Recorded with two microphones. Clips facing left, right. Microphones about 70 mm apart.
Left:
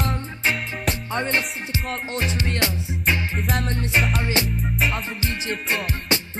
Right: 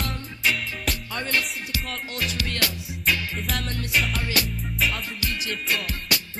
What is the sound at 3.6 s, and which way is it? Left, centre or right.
Music, left.